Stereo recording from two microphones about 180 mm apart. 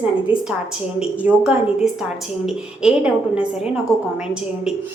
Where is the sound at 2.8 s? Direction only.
5° right (ahead or behind).